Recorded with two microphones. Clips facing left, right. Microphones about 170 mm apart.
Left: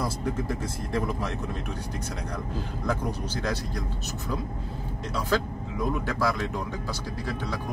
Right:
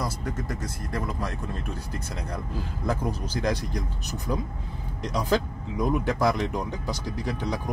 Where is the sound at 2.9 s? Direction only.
10° right (ahead or behind).